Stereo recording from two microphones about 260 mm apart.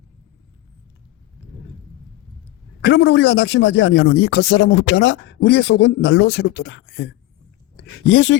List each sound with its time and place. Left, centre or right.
2.8 s speech: left